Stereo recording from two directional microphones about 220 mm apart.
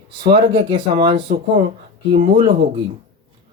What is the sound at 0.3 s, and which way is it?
Speech, 50° right (ahead or behind).